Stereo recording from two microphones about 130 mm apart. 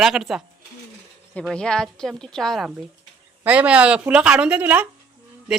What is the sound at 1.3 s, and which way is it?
Speech, 10° left (ahead or behind).